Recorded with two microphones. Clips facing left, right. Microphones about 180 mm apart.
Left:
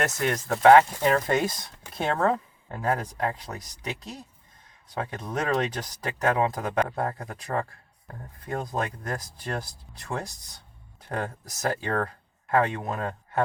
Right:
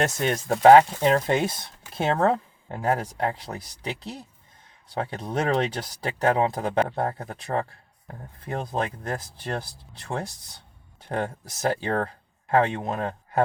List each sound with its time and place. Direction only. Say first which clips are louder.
0.0 s speech: right 2 dB; 25° right (ahead or behind)